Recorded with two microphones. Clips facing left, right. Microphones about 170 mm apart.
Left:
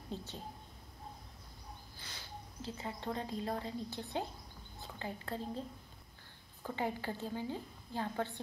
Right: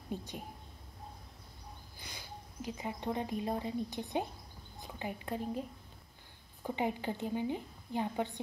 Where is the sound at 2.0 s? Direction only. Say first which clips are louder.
Right 3 dB; 15° right (ahead or behind).